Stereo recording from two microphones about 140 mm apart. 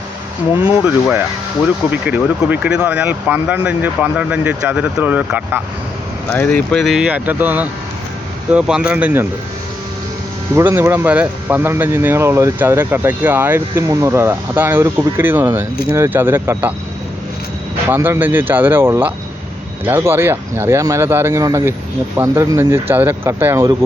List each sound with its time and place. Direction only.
0.6 s speech: 10° right (ahead or behind)
6.3 s speech: 10° left (ahead or behind); by 9.2 s 10° right (ahead or behind)
10.5 s speech: 15° right (ahead or behind)
17.8 s speech: 15° right (ahead or behind)